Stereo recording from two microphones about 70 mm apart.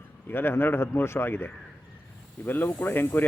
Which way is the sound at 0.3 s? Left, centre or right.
Left.